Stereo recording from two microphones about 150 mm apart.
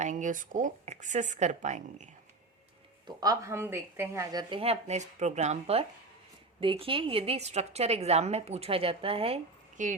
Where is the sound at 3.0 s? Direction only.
25° right (ahead or behind); by 9.4 s 40° right (ahead or behind).